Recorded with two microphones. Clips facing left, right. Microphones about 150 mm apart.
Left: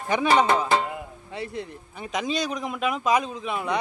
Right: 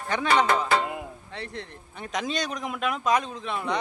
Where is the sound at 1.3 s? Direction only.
10° left (ahead or behind).